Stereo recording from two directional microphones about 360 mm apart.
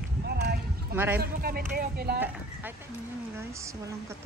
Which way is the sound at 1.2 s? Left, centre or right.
Right.